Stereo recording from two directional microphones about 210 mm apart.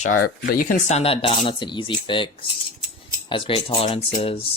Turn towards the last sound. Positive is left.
turn(degrees=25)  # may be behind; listen again after turning